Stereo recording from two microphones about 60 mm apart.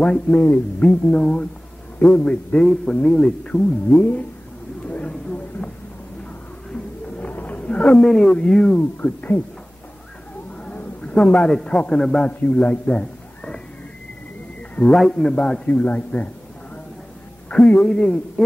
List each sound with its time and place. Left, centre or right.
0.0 s a man's voice: left
3.9 s a man's voice: left
4.8 s a sound: left
6.7 s a sound: centre
7.3 s speech: left
9.0 s a man's voice: left
10.6 s a sound: centre
12.0 s a man's voice: centre
12.3 s a man's voice: left
14.9 s a man's voice: centre
15.7 s a man's voice: left
17.6 s a man's voice: centre